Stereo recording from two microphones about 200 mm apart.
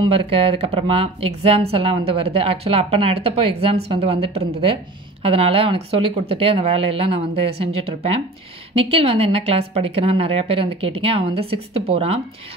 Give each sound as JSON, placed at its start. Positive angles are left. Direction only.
{"t": 0.0, "sound": "speech", "side_deg": -25}